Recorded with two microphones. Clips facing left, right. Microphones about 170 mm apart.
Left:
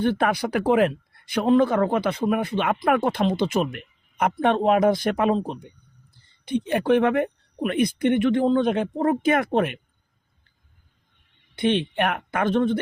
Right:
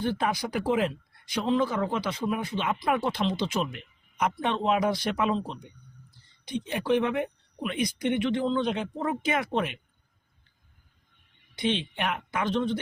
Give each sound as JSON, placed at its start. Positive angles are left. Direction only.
{"t": 0.0, "sound": "speech", "side_deg": 65}
{"t": 6.4, "sound": "speech", "side_deg": 60}
{"t": 11.5, "sound": "speech", "side_deg": 55}